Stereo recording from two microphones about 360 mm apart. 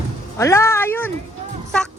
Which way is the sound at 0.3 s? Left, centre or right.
Centre.